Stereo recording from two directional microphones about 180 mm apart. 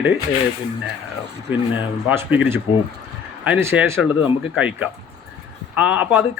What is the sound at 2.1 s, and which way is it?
A man's voice, 10° right (ahead or behind).